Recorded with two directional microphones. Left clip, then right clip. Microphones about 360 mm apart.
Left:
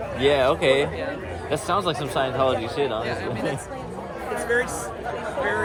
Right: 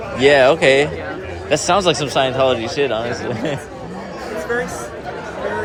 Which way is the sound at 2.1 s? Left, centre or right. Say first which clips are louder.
Right 4 dB; centre.